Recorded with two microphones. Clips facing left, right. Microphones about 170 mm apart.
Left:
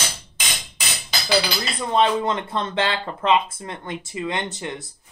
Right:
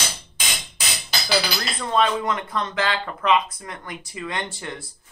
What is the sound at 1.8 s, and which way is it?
Speech, 20° left (ahead or behind).